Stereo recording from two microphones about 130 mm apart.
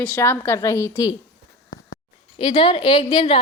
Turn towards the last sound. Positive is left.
turn(degrees=40)  # may be behind; listen again after turning